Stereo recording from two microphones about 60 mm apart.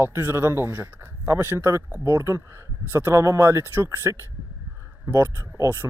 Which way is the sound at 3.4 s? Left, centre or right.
Right.